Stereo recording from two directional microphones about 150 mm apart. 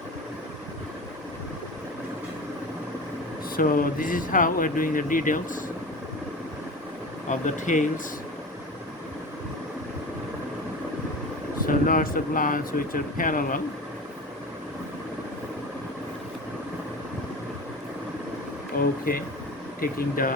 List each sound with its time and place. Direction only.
3.5 s speech: 70° left (ahead or behind)
7.3 s speech: 55° left (ahead or behind)
11.6 s speech: 65° left (ahead or behind)
18.8 s speech: 75° left (ahead or behind)